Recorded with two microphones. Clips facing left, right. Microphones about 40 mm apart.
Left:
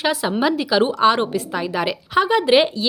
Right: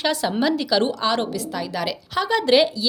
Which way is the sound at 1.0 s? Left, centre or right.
Left.